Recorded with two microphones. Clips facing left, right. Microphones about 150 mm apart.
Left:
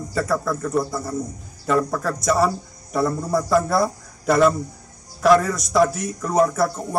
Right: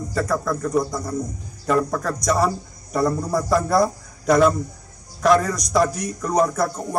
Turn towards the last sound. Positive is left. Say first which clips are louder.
# left 1 dB
turn(degrees=5)  # may be behind; listen again after turning